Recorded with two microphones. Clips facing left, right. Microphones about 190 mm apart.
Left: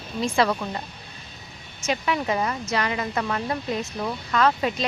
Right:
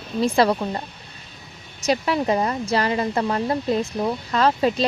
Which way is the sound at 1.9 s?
35° right (ahead or behind).